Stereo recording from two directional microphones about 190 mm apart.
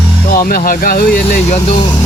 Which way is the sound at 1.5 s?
35° left (ahead or behind).